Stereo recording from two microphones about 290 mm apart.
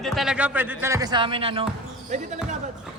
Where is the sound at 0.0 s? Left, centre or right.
Centre; by 2.6 s right.